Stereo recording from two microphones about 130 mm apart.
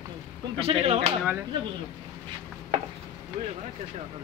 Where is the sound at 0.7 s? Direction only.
55° right (ahead or behind).